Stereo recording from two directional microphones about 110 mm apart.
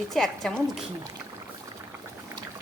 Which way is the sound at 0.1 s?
Centre (ahead or behind).